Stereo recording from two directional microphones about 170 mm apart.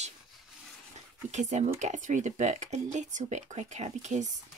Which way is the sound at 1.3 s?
45° right (ahead or behind).